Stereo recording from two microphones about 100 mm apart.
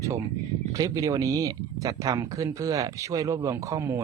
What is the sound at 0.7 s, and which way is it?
Speech, 40° right (ahead or behind).